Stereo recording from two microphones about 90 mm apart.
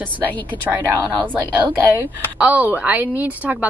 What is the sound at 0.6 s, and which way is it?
A woman's voice, 20° right (ahead or behind).